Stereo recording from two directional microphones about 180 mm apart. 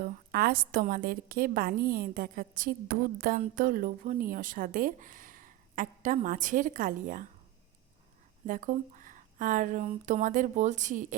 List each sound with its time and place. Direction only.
0.0 s speech: 55° right (ahead or behind)
8.4 s speech: 50° right (ahead or behind)